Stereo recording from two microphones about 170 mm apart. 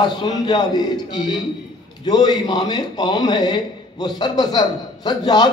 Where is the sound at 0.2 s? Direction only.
25° left (ahead or behind).